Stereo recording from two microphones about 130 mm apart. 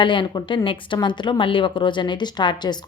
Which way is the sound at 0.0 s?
40° left (ahead or behind).